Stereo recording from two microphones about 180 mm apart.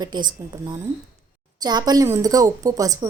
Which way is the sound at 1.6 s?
20° right (ahead or behind).